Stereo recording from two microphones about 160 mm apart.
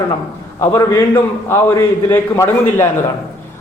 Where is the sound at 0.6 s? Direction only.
15° left (ahead or behind).